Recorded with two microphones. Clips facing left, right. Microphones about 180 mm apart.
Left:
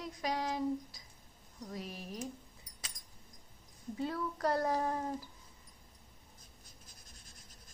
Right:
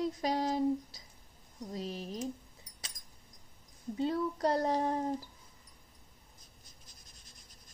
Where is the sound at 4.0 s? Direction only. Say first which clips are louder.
Right 5 dB; 25° right (ahead or behind).